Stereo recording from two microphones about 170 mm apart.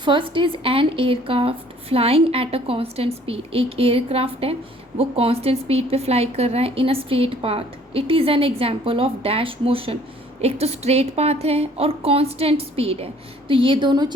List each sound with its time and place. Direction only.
0.0 s a woman's voice: 30° right (ahead or behind)